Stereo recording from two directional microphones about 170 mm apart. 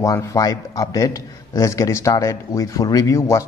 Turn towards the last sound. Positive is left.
turn(degrees=15)  # may be behind; listen again after turning